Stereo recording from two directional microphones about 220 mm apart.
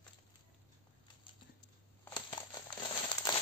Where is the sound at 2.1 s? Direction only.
20° left (ahead or behind).